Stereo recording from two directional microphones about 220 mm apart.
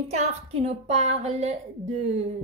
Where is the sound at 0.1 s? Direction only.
30° right (ahead or behind).